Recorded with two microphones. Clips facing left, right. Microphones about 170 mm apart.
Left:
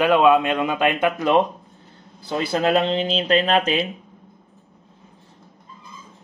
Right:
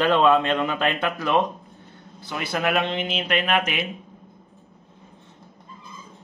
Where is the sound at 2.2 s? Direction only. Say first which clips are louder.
Left 5 dB; 30° left (ahead or behind).